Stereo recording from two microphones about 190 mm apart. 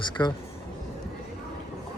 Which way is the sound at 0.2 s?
25° left (ahead or behind).